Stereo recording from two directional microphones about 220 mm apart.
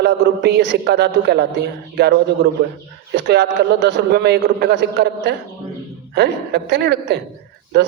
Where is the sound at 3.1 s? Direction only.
50° right (ahead or behind).